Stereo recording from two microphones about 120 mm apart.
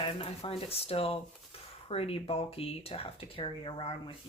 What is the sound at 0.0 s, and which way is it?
Speech, 50° left (ahead or behind).